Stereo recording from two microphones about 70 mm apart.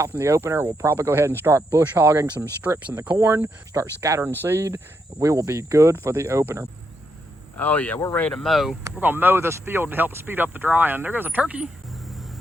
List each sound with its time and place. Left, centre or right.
0.2 s speech: right
2.6 s speech: right
3.2 s speech: right
5.2 s speech: right
7.5 s speech: left
8.4 s speech: centre
9.0 s speech: right
11.9 s music: centre